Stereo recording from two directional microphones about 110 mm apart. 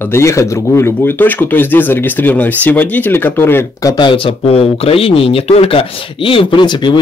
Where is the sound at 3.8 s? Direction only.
45° left (ahead or behind).